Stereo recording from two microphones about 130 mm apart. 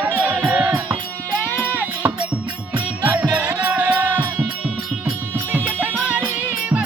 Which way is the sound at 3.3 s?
10° right (ahead or behind).